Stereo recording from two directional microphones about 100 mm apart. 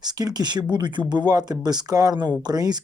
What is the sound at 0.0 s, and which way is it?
Speech, 40° right (ahead or behind).